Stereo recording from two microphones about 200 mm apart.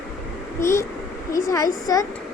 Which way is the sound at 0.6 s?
15° left (ahead or behind).